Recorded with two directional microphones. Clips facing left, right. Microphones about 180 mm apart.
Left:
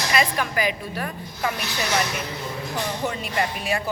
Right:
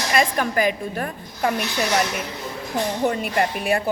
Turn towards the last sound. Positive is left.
turn(degrees=-55)  # may be behind; listen again after turning